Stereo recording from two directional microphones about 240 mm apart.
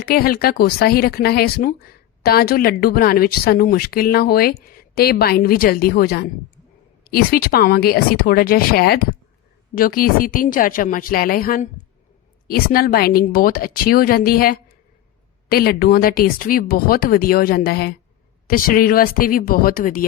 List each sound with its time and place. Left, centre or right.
0.0 s speech: left